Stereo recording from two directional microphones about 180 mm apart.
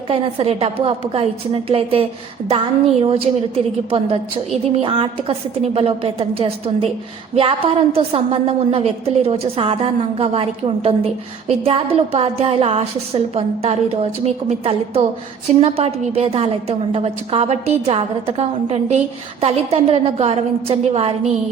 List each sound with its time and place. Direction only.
0.1 s a woman's voice: 30° right (ahead or behind)